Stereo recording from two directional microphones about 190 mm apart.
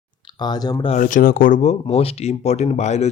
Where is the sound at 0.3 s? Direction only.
20° left (ahead or behind).